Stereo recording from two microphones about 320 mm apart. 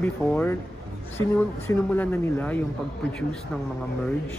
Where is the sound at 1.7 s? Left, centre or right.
Centre.